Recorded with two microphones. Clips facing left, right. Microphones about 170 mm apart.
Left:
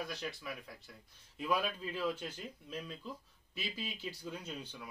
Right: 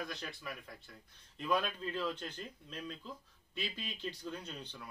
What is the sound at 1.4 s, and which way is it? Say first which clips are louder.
Speech: even; 10° left (ahead or behind).